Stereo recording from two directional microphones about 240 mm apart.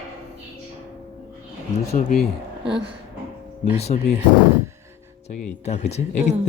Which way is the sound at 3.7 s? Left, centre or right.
Left.